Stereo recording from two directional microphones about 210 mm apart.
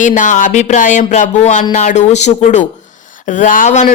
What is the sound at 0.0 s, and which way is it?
Speech, 35° left (ahead or behind).